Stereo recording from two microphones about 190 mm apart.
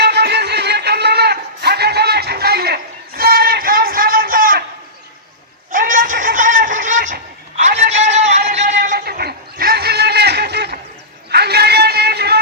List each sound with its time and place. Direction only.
0.0 s music: 60° right (ahead or behind)
5.7 s a sound: 45° right (ahead or behind); by 10.8 s 60° right (ahead or behind)
11.3 s music: 60° right (ahead or behind)